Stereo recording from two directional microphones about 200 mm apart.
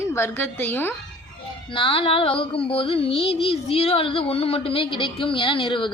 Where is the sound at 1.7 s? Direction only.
25° left (ahead or behind).